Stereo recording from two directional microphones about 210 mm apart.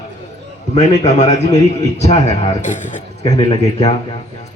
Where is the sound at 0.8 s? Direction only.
30° left (ahead or behind).